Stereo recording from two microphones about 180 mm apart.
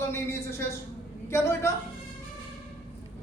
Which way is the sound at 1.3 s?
15° left (ahead or behind).